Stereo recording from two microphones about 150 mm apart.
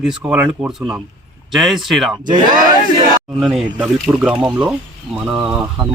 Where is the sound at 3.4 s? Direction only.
5° right (ahead or behind).